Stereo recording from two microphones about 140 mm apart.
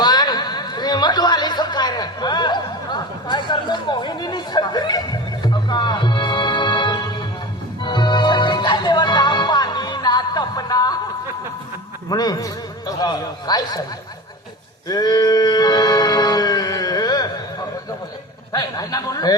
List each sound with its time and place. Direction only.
0.0 s chatter: 30° left (ahead or behind)
7.9 s music: 30° left (ahead or behind)
12.0 s a man's voice: 30° left (ahead or behind)
14.8 s a sound: 30° left (ahead or behind)
18.5 s a man's voice: 25° left (ahead or behind)